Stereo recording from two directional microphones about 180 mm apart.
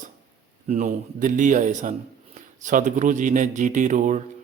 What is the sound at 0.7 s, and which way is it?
A man's voice, 40° right (ahead or behind).